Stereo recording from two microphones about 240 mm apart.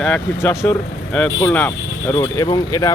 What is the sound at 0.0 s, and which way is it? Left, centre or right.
Speech, centre.